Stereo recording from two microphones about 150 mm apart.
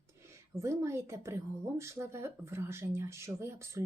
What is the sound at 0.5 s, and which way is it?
A woman's voice, 20° right (ahead or behind).